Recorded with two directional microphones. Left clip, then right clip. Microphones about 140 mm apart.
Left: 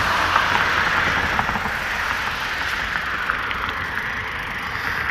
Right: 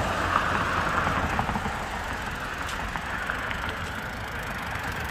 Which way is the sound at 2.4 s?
65° right (ahead or behind).